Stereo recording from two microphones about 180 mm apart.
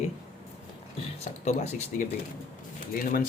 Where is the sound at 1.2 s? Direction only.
40° left (ahead or behind).